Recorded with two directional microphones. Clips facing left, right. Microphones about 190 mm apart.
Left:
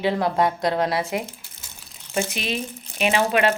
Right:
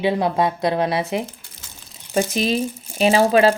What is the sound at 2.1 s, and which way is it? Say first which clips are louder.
Speech: right 6 dB; 35° right (ahead or behind).